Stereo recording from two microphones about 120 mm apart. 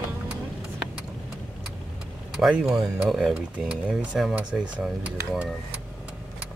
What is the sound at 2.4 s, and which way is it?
Speech, 5° right (ahead or behind).